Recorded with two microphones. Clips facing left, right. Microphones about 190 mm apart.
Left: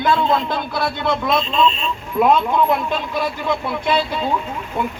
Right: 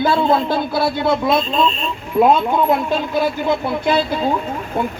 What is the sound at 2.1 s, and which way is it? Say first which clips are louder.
Speech: right 2 dB; 30° right (ahead or behind).